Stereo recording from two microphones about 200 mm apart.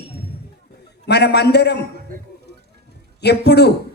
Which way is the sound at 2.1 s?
45° right (ahead or behind).